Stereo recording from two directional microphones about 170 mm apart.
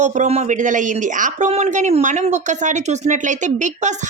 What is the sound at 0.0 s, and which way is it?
Speech, 45° right (ahead or behind).